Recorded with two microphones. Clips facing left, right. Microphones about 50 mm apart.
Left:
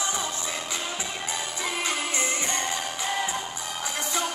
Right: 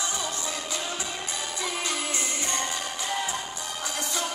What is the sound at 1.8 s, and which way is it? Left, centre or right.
Music, left.